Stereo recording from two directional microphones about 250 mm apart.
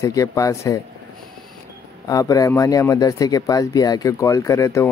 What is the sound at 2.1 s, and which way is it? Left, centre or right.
Speech, centre.